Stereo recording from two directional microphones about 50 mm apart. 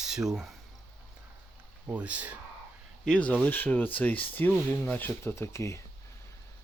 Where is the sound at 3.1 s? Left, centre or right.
Left.